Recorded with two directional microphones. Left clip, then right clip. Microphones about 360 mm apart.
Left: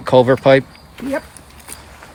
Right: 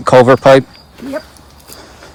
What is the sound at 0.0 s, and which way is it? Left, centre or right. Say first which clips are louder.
Speech: right 5 dB; centre.